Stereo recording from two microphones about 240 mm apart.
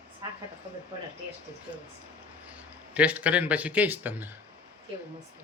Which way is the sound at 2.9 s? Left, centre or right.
Centre.